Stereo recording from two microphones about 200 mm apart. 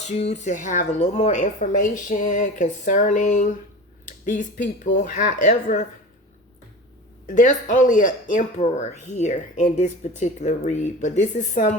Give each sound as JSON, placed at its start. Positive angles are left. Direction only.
{"t": 0.0, "sound": "speech", "side_deg": 30}
{"t": 7.3, "sound": "speech", "side_deg": 40}